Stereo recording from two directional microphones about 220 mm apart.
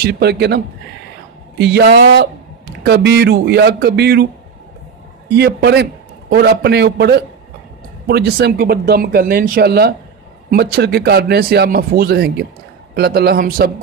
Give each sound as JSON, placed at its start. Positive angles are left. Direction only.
{"t": 0.0, "sound": "speech", "side_deg": -50}
{"t": 1.6, "sound": "speech", "side_deg": -50}
{"t": 5.3, "sound": "speech", "side_deg": -50}